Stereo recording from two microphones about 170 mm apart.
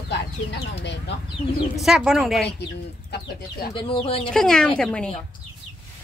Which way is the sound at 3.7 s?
30° left (ahead or behind).